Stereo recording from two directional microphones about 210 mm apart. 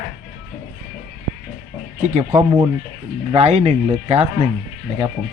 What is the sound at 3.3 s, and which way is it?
Speech, 30° right (ahead or behind).